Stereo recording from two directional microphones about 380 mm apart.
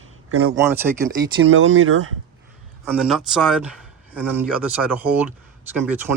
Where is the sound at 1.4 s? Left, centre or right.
Right.